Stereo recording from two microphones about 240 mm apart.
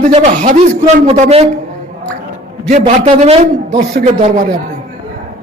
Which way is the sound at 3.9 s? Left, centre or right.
Right.